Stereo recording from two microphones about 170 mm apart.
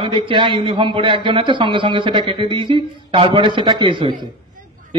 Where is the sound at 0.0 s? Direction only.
30° right (ahead or behind).